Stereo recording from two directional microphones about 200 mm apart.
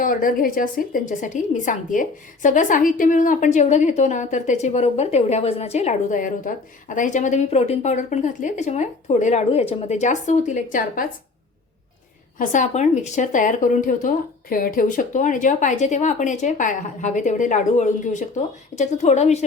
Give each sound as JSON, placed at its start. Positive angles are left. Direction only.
{"t": 0.0, "sound": "a woman's voice", "side_deg": 45}
{"t": 12.4, "sound": "a woman's voice", "side_deg": 40}